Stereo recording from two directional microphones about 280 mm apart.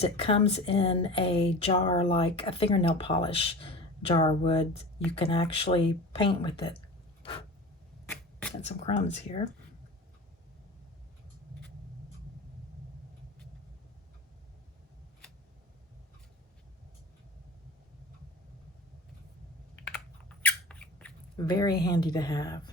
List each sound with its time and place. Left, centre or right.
0.0 s speech: left
8.1 s shuffling cards: centre
8.6 s speech: left
20.4 s a sound: centre
21.4 s speech: centre